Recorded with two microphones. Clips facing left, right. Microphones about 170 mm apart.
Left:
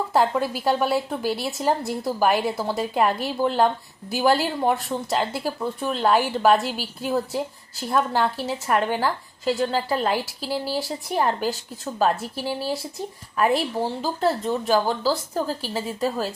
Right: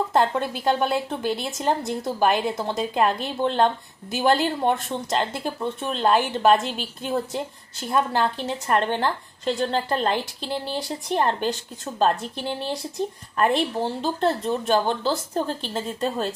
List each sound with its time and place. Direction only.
0.1 s speech: 5° left (ahead or behind)